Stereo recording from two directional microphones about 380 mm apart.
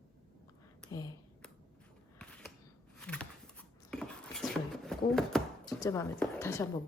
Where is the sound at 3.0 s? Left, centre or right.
Centre.